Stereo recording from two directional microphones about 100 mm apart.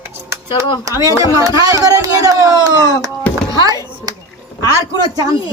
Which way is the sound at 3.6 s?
40° right (ahead or behind).